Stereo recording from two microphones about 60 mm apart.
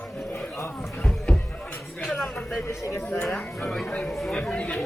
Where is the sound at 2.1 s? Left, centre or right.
Centre.